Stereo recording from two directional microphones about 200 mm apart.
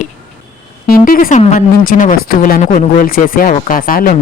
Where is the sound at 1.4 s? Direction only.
35° left (ahead or behind).